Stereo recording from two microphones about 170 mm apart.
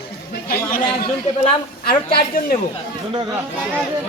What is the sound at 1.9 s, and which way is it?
Speech, 60° left (ahead or behind).